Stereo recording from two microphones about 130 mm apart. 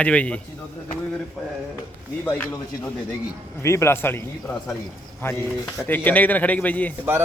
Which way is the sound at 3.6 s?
20° left (ahead or behind).